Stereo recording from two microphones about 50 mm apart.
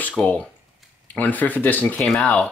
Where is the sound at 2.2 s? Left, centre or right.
Left.